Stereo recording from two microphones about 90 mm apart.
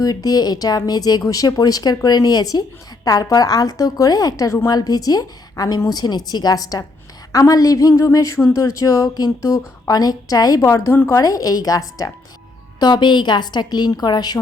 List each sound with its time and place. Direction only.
0.0 s speech: 45° left (ahead or behind)
12.8 s speech: 55° left (ahead or behind)